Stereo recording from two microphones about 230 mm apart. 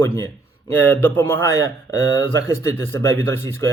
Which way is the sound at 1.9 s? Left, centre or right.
Right.